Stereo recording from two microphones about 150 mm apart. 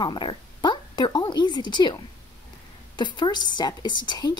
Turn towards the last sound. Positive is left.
turn(degrees=30)  # may be behind; listen again after turning